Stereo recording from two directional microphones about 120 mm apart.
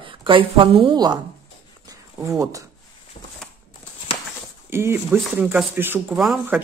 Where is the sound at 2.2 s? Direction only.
25° right (ahead or behind).